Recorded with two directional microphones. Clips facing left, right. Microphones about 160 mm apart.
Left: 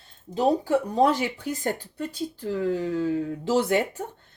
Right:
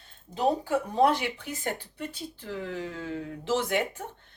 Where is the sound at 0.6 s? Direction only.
40° left (ahead or behind).